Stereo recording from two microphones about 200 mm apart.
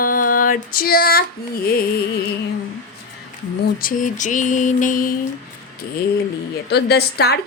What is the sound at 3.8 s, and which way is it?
Mantra, 40° left (ahead or behind).